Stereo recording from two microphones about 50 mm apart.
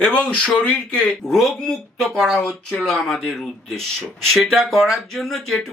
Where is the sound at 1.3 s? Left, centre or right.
Centre.